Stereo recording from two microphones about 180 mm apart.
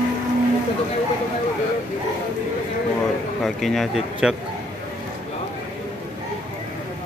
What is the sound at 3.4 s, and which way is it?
Speech, centre (ahead or behind).